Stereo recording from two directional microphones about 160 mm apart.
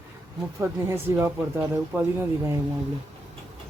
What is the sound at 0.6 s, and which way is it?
Speech, 15° right (ahead or behind).